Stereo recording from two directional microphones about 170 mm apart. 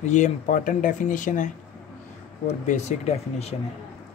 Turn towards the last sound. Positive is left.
turn(degrees=40)  # may be behind; listen again after turning